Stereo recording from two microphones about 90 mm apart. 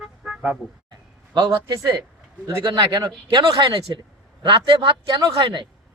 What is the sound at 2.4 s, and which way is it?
A man's voice, 45° right (ahead or behind).